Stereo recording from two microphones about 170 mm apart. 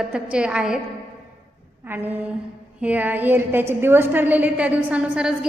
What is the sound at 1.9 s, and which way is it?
A woman's voice, 10° right (ahead or behind).